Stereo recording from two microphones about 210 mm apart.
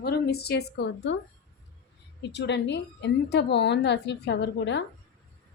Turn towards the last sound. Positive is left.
turn(degrees=60)  # may be behind; listen again after turning